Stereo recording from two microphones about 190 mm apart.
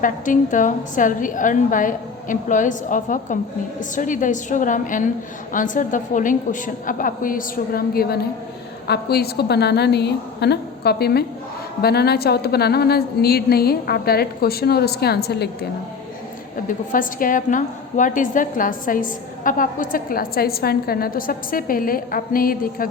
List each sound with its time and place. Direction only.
0.0 s a woman's voice: 45° left (ahead or behind)
16.6 s a woman's voice: 45° left (ahead or behind)